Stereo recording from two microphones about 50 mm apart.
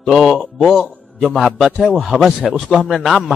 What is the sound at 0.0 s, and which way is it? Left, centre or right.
A man's voice, centre.